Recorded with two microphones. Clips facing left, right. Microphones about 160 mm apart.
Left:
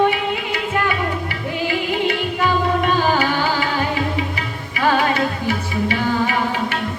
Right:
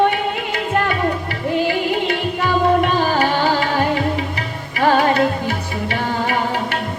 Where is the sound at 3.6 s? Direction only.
45° right (ahead or behind).